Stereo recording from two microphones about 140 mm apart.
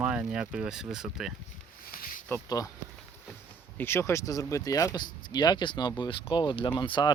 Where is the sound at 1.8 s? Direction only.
85° left.